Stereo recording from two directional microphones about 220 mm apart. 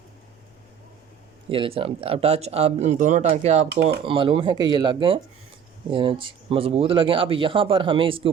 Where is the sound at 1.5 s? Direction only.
25° right (ahead or behind).